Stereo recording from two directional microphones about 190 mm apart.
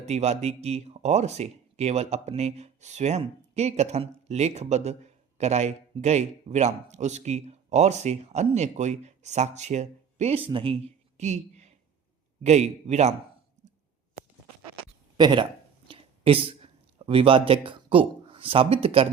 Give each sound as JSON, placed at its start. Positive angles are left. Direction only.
{"t": 0.0, "sound": "speech", "side_deg": -35}
{"t": 15.2, "sound": "speech", "side_deg": -25}
{"t": 15.9, "sound": "a sound", "side_deg": -30}
{"t": 17.0, "sound": "speech", "side_deg": -30}